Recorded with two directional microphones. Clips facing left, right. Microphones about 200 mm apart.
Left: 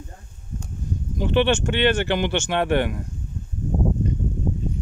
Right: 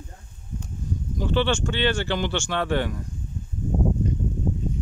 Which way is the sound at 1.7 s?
55° left (ahead or behind).